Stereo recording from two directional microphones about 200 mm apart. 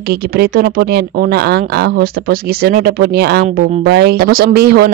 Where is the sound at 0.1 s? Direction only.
50° right (ahead or behind).